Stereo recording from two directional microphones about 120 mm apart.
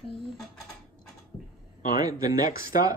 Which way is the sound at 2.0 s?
30° right (ahead or behind).